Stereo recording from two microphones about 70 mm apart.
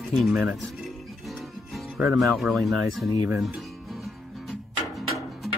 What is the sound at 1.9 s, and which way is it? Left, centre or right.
Speech, centre.